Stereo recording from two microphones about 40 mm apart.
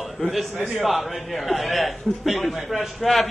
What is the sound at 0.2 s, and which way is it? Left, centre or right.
Speech, left.